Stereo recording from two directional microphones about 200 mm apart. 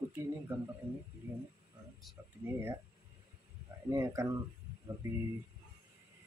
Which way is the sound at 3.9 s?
15° right (ahead or behind).